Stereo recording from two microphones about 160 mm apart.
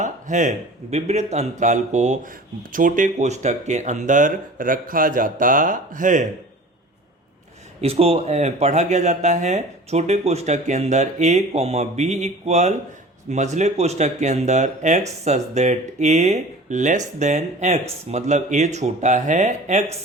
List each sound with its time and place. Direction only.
0.0 s speech: 50° right (ahead or behind)
7.8 s speech: 40° right (ahead or behind)